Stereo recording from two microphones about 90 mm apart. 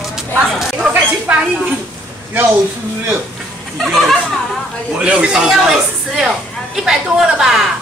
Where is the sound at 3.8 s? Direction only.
5° right (ahead or behind).